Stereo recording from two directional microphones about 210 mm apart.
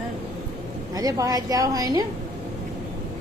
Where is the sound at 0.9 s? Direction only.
15° right (ahead or behind).